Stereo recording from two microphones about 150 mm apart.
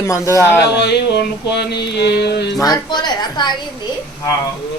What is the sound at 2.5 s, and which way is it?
Speech, 25° left (ahead or behind).